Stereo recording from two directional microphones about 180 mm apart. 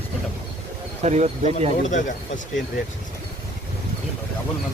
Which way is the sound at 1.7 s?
45° left (ahead or behind).